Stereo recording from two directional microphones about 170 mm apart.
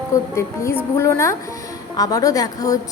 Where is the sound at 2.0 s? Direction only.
20° left (ahead or behind).